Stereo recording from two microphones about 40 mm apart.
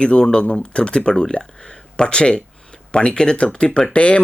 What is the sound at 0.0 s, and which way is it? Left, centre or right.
Speech, left.